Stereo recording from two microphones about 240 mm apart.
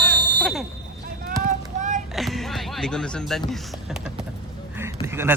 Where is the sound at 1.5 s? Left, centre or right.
Right.